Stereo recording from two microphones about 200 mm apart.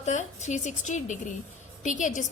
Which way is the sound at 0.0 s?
35° left (ahead or behind).